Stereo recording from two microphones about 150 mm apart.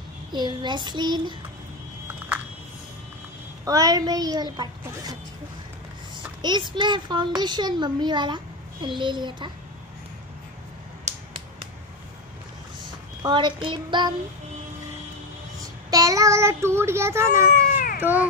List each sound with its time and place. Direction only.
0.3 s a child's voice: 30° right (ahead or behind)
3.6 s a child's voice: 20° right (ahead or behind)
6.4 s a child's voice: 30° right (ahead or behind)
13.2 s a child's voice: 30° right (ahead or behind)
15.6 s speech: 25° right (ahead or behind)
17.7 s baby cry: 65° left (ahead or behind)